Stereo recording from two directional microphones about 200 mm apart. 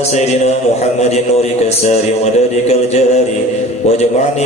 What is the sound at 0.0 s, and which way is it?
A man's voice, 30° left (ahead or behind).